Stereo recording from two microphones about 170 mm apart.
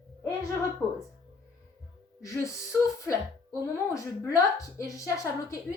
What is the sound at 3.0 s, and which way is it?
A woman's voice, 20° left (ahead or behind).